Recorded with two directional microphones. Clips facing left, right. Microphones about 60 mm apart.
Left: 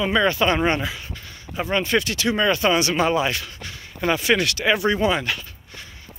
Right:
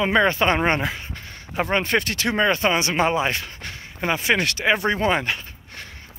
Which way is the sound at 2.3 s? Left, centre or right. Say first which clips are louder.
Even; right.